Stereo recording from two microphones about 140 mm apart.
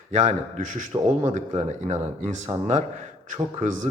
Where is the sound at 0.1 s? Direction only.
60° right (ahead or behind).